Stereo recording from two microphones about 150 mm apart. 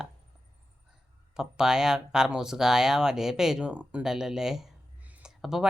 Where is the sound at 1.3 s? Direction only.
5° right (ahead or behind).